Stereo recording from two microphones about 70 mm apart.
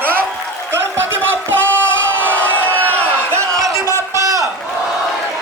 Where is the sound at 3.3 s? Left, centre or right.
Right.